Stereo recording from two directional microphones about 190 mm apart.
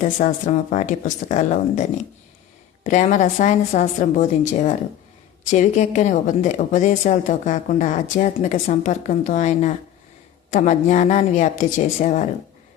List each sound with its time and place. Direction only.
0.0 s a woman's voice: 40° left (ahead or behind)
2.8 s a woman's voice: 40° left (ahead or behind)